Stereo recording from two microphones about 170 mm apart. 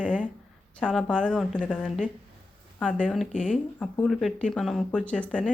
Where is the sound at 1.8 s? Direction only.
5° right (ahead or behind).